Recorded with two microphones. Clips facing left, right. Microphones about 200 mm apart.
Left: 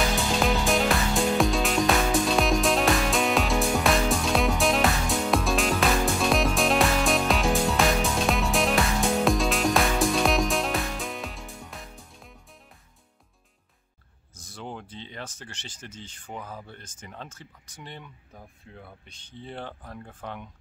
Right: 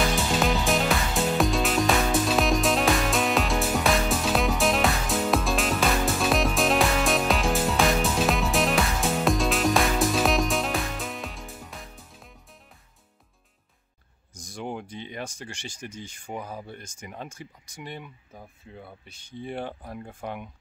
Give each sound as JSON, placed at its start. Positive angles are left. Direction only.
{"t": 0.3, "sound": "music", "side_deg": 0}
{"t": 14.3, "sound": "speech", "side_deg": -15}